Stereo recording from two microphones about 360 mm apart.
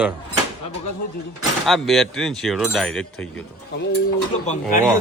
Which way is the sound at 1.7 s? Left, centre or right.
Centre.